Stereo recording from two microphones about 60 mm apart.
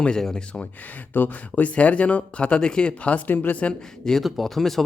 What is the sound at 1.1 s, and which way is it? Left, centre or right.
Speech, left.